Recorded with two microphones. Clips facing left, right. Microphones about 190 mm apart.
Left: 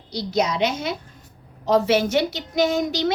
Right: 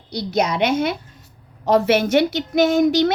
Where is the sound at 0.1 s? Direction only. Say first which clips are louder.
Right 2 dB; 55° right (ahead or behind).